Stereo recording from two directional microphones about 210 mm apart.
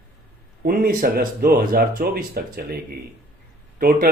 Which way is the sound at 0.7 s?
45° right (ahead or behind).